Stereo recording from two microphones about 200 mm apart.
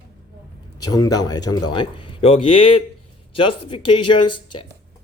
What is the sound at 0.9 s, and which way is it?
Speech, 20° left (ahead or behind).